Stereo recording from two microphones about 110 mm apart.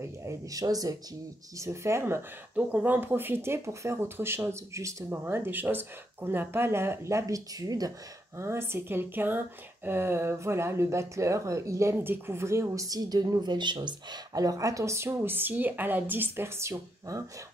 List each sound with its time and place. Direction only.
0.2 s speech: 30° right (ahead or behind)
8.4 s speech: 20° right (ahead or behind)